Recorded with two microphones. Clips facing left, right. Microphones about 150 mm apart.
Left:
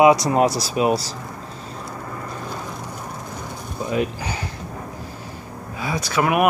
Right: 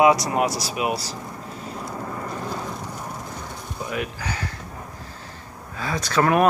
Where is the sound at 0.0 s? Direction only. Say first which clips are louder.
Left 3 dB; 20° left (ahead or behind).